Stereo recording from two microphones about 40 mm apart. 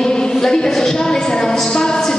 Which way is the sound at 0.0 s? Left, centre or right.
Centre.